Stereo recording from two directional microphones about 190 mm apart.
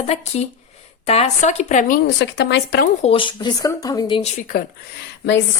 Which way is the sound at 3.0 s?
30° left (ahead or behind).